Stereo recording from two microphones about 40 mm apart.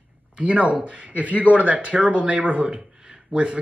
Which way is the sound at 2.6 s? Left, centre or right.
Right.